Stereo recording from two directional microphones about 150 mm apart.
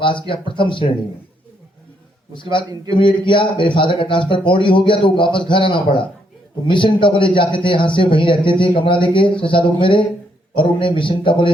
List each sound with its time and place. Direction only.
0.0 s a man's voice: 35° left (ahead or behind)
2.3 s a man's voice: 35° left (ahead or behind)